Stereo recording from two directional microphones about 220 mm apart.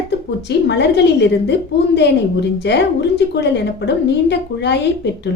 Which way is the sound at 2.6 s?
50° left (ahead or behind).